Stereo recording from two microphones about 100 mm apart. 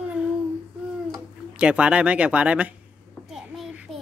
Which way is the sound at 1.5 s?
10° right (ahead or behind).